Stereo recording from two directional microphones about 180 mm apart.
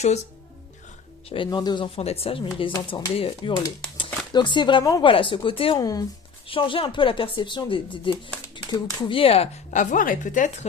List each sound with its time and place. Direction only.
1.3 s speech: 25° left (ahead or behind); by 10.7 s 45° left (ahead or behind)